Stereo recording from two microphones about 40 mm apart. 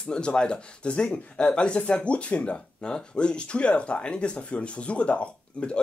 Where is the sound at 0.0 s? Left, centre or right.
Left.